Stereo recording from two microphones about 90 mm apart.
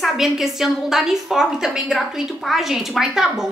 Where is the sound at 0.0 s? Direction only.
5° right (ahead or behind).